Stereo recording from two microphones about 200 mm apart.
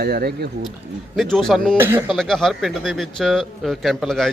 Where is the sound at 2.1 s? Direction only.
Centre (ahead or behind).